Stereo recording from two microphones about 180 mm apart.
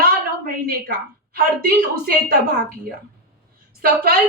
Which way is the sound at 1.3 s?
55° right (ahead or behind).